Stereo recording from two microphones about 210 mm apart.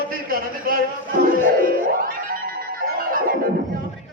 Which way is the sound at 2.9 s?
45° right (ahead or behind).